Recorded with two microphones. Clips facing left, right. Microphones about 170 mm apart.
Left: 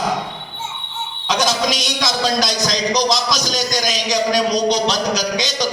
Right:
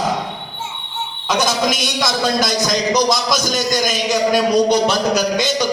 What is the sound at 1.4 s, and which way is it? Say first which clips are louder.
A man's voice: even; 50° right (ahead or behind).